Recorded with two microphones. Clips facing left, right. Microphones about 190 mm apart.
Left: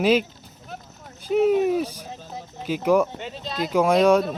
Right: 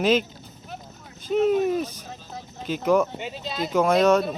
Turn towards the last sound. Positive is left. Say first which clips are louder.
# left 1 dB
turn(degrees=10)  # may be behind; listen again after turning